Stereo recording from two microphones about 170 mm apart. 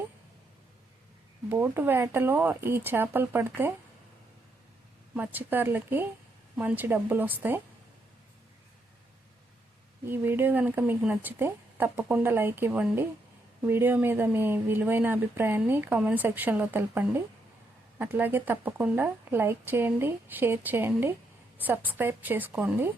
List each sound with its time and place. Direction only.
1.5 s speech: 10° right (ahead or behind)
5.1 s speech: 10° right (ahead or behind)
10.1 s speech: 15° right (ahead or behind)